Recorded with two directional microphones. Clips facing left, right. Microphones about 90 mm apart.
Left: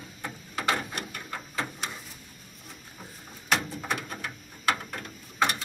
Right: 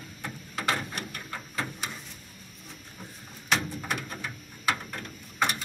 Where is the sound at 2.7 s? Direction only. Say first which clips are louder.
Even; 5° left (ahead or behind).